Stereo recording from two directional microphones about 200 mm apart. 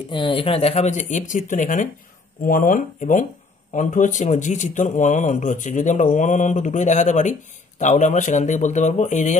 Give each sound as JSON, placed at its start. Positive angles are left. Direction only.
{"t": 0.1, "sound": "speech", "side_deg": 25}